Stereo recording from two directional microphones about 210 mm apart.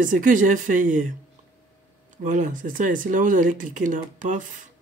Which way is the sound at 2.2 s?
35° right (ahead or behind).